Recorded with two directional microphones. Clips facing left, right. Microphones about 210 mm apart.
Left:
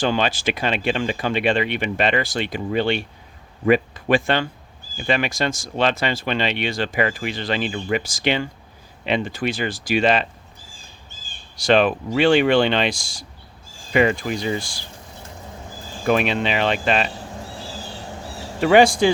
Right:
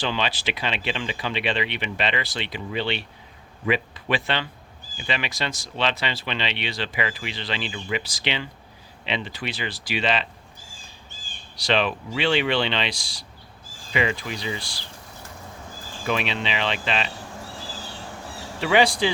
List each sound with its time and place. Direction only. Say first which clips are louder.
0.0 s speech: left 6 dB; 45° left (ahead or behind)
11.5 s speech: left 7 dB; 50° left (ahead or behind)
16.0 s speech: left 7 dB; 50° left (ahead or behind)
18.6 s speech: left 6 dB; 50° left (ahead or behind)